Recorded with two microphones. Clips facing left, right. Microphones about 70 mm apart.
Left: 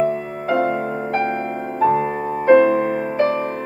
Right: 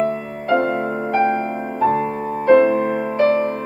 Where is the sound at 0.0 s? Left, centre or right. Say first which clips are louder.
Left 1 dB; centre.